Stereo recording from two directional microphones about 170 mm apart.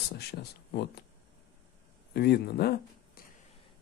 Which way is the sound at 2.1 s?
75° left (ahead or behind).